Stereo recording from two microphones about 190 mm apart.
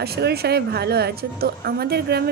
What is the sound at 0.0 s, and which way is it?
A woman's voice, 60° right (ahead or behind).